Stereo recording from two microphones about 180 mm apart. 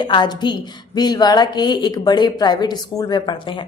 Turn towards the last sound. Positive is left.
turn(degrees=25)  # may be behind; listen again after turning